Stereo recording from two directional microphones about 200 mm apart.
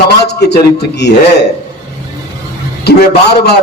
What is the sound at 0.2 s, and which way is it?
Speech, 55° left (ahead or behind).